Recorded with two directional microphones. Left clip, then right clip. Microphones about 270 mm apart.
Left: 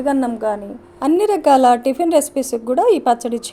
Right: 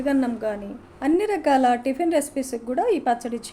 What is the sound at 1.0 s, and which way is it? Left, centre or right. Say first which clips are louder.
A woman's voice: left 6 dB; left.